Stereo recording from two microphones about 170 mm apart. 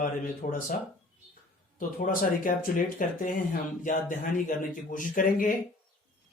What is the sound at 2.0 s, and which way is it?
Speech, 55° left (ahead or behind).